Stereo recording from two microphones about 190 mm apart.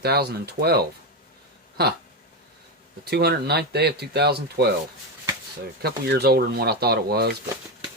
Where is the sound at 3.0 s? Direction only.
55° right (ahead or behind).